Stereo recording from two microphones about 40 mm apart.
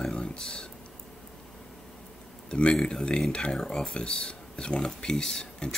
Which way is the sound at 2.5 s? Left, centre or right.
Left.